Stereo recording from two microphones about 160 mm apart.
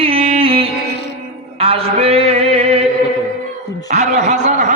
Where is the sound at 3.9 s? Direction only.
50° right (ahead or behind).